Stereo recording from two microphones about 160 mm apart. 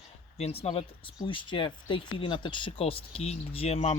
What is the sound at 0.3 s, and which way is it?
Speech, 40° left (ahead or behind).